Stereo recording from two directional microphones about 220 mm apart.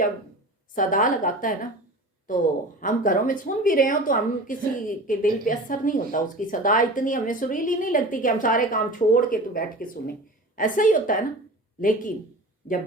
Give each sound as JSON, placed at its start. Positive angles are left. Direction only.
{"t": 0.8, "sound": "a woman's voice", "side_deg": 35}
{"t": 2.8, "sound": "a woman's voice", "side_deg": 40}